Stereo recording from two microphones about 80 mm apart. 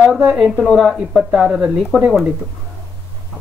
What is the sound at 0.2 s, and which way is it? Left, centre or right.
Speech, centre.